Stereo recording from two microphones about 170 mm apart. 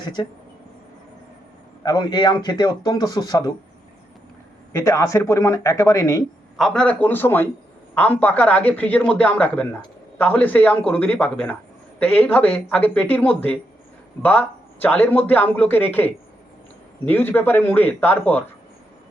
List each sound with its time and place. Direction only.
0.0 s speech: 25° left (ahead or behind)
1.8 s speech: 25° left (ahead or behind)
4.7 s a man's voice: 20° left (ahead or behind)
6.6 s a man's voice: 5° left (ahead or behind)
17.1 s a man's voice: 10° left (ahead or behind)